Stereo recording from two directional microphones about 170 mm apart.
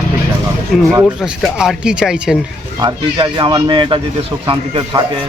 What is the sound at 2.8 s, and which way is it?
Speech, 25° right (ahead or behind).